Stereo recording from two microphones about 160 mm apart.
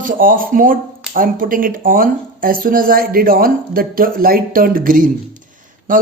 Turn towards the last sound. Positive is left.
turn(degrees=-60)  # may be behind; listen again after turning